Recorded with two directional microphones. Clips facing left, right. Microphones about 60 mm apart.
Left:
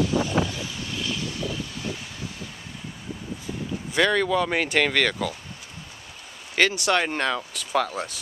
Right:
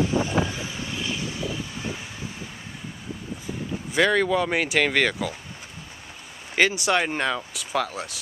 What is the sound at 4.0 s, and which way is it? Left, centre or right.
Speech, centre.